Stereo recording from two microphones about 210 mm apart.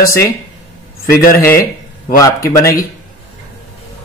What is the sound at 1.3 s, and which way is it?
A man's voice, 10° left (ahead or behind).